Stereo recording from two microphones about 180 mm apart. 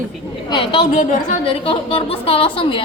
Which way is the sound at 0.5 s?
25° left (ahead or behind).